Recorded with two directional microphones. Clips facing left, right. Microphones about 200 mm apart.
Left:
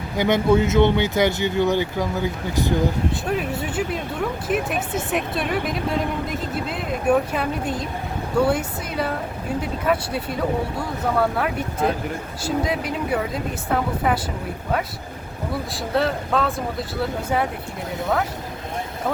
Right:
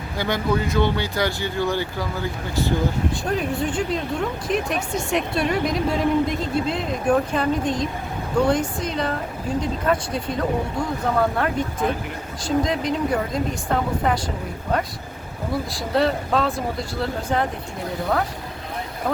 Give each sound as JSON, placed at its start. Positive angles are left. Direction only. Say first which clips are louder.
{"t": 0.2, "sound": "speech", "louder": "left 5 dB", "side_deg": 20}
{"t": 3.1, "sound": "speech", "louder": "even", "side_deg": 5}
{"t": 15.7, "sound": "speech", "louder": "right 1 dB", "side_deg": 0}